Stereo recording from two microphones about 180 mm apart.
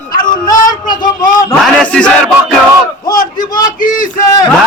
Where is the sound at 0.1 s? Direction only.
50° left (ahead or behind).